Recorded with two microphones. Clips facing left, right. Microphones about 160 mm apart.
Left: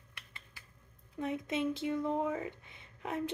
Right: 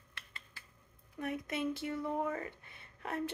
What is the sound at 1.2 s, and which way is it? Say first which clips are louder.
Speech: left 3 dB; 20° left (ahead or behind).